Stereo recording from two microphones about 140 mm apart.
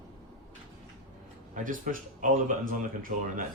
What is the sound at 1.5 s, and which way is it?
Speech, 70° right (ahead or behind).